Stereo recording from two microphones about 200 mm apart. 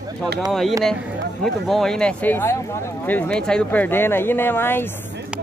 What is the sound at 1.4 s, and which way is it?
Speech, centre (ahead or behind).